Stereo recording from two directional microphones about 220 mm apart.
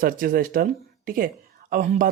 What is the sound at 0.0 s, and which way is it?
Speech, 40° right (ahead or behind).